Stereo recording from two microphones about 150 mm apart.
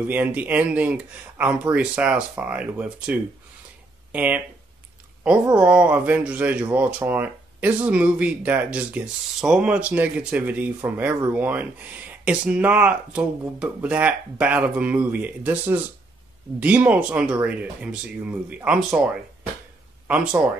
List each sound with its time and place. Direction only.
0.0 s speech: 10° right (ahead or behind)